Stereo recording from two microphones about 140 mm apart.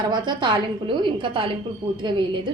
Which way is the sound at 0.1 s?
30° right (ahead or behind).